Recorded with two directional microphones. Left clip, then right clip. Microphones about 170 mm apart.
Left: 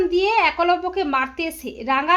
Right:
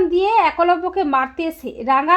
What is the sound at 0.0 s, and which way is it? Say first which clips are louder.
A woman's voice: right 3 dB; 35° right (ahead or behind).